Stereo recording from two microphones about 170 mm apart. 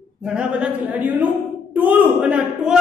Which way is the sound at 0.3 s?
5° right (ahead or behind).